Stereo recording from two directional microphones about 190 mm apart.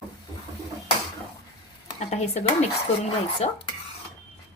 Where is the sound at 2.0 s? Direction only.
35° left (ahead or behind).